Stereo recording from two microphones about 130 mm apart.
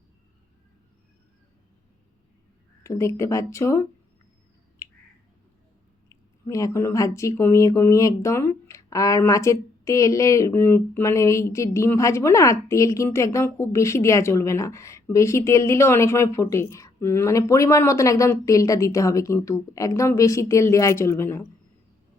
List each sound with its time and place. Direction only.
2.8 s speech: 25° left (ahead or behind)
6.1 s speech: 25° left (ahead or behind)